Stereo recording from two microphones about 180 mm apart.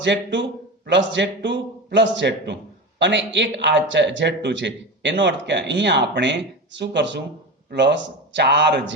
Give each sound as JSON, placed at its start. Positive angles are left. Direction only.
{"t": 0.0, "sound": "speech", "side_deg": -80}